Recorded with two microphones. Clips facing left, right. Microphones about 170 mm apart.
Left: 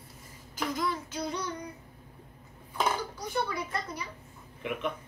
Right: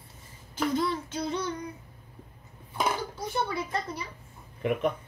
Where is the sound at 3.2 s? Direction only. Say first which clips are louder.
Right 2 dB; 25° right (ahead or behind).